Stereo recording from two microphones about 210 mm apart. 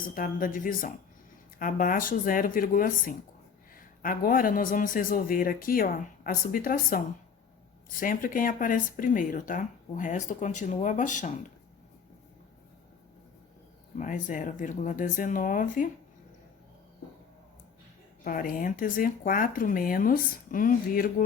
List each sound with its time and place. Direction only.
0.0 s speech: 40° left (ahead or behind)
13.9 s speech: 35° left (ahead or behind)
18.2 s speech: 40° left (ahead or behind)